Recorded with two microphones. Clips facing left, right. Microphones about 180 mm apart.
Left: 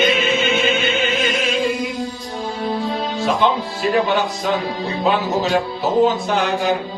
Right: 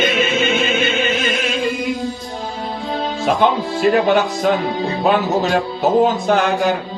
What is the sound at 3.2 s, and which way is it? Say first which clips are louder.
Speech: right 2 dB; 50° right (ahead or behind).